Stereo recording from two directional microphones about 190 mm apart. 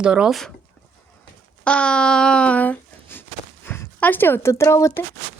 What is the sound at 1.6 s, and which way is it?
Speech, 5° left (ahead or behind).